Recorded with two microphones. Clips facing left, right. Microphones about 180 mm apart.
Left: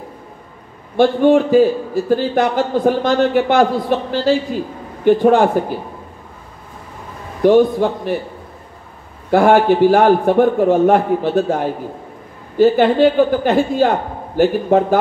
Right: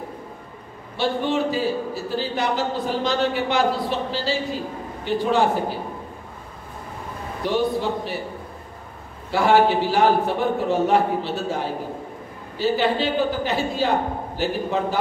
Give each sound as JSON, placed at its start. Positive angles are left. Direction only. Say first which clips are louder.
{"t": 0.9, "sound": "a man's voice", "louder": "left 11 dB", "side_deg": 50}
{"t": 7.4, "sound": "a man's voice", "louder": "left 11 dB", "side_deg": 50}
{"t": 9.3, "sound": "a man's voice", "louder": "left 6 dB", "side_deg": 50}